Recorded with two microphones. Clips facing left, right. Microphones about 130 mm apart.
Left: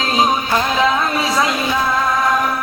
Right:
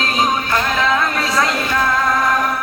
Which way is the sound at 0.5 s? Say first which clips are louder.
Left 1 dB; 10° left (ahead or behind).